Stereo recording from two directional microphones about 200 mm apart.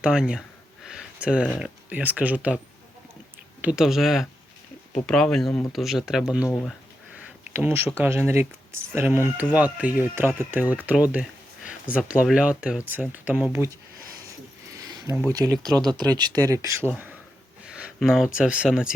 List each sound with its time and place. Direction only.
0.0 s speech: 5° right (ahead or behind)
0.9 s a sound: 5° right (ahead or behind)
1.5 s speech: 5° right (ahead or behind)
3.6 s speech: 5° right (ahead or behind)
6.5 s speech: 5° left (ahead or behind)
7.2 s speech: 10° right (ahead or behind)
14.3 s a sound: 15° right (ahead or behind)
15.3 s speech: 20° right (ahead or behind)